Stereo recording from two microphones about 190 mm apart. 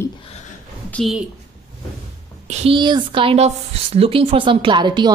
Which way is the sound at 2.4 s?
30° right (ahead or behind).